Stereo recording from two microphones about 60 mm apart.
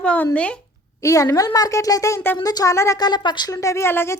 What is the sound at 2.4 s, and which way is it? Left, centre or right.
Speech, left.